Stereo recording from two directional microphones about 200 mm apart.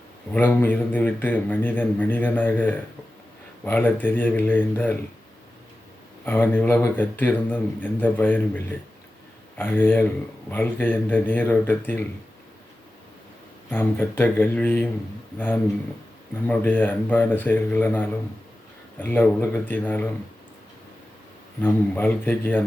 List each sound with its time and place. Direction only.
0.3 s a man's voice: 10° left (ahead or behind)
6.2 s a man's voice: 10° left (ahead or behind)
13.7 s a man's voice: 10° left (ahead or behind)
21.6 s a man's voice: 10° left (ahead or behind)